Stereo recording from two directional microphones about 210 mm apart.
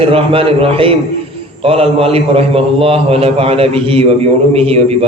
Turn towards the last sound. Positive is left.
turn(degrees=-30)  # may be behind; listen again after turning